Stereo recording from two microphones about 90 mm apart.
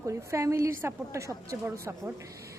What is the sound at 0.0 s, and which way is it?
A woman's voice, 35° right (ahead or behind).